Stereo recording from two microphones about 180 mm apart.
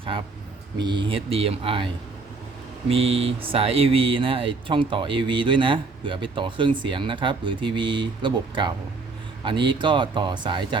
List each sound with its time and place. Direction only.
0.8 s speech: 25° right (ahead or behind)
2.9 s speech: 30° right (ahead or behind)